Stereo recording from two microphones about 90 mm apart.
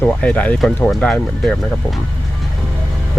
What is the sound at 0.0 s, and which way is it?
Speech, 15° left (ahead or behind).